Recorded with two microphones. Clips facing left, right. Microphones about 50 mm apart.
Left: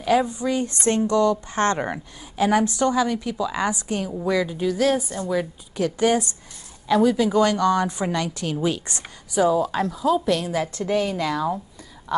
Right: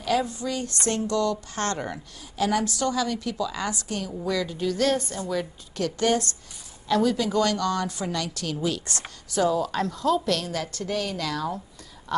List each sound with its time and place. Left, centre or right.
0.0 s a woman's voice: left